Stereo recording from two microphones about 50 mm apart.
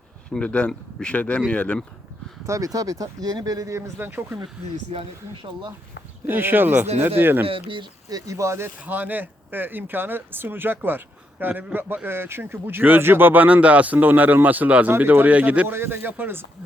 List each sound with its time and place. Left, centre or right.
0.3 s speech: left
0.7 s speech: centre
1.5 s speech: left
2.5 s speech: right
3.7 s speech: right
3.9 s speech: right
6.2 s speech: right
8.3 s speech: right
8.9 s speech: right
14.9 s speech: right
15.6 s speech: right